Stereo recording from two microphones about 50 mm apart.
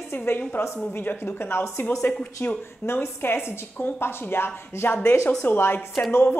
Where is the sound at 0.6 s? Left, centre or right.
Left.